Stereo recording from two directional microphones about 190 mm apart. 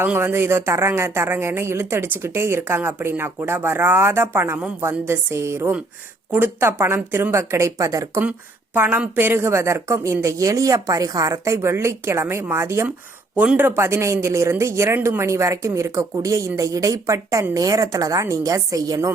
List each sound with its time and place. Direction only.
0.0 s speech: 10° right (ahead or behind)